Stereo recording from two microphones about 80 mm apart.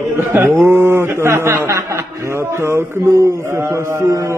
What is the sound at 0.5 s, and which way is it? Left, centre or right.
A man's voice, right.